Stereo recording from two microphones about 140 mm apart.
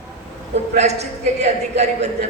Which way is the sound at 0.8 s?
50° right (ahead or behind).